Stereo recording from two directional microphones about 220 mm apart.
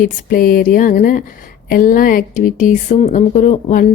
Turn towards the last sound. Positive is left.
turn(degrees=35)  # may be behind; listen again after turning